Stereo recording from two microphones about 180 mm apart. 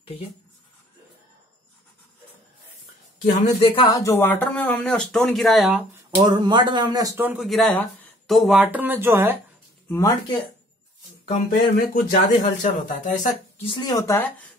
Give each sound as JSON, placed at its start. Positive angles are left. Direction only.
{"t": 3.6, "sound": "speech", "side_deg": 25}
{"t": 6.1, "sound": "speech", "side_deg": -25}
{"t": 7.4, "sound": "speech", "side_deg": 0}
{"t": 9.8, "sound": "speech", "side_deg": 20}
{"t": 11.2, "sound": "speech", "side_deg": 50}
{"t": 13.7, "sound": "speech", "side_deg": 20}